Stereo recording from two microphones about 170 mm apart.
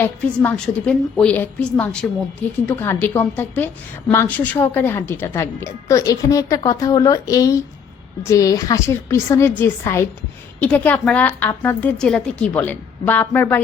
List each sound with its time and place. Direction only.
0.0 s a woman's voice: 10° left (ahead or behind)